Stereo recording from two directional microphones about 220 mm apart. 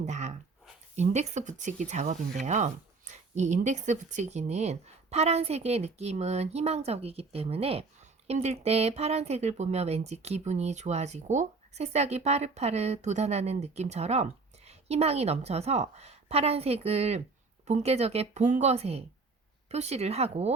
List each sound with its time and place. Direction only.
0.0 s speech: 30° right (ahead or behind)